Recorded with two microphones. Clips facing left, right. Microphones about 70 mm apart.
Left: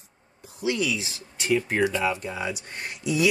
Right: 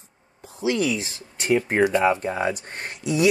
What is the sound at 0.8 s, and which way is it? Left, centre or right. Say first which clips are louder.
Speech: right 3 dB; right.